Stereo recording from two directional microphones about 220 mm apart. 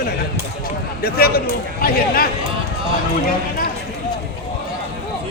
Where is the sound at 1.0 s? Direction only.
45° left (ahead or behind).